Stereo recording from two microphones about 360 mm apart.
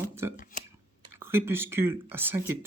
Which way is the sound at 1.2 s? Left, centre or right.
Centre.